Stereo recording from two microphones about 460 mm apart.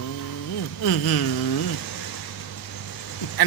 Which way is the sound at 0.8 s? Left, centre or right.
Left.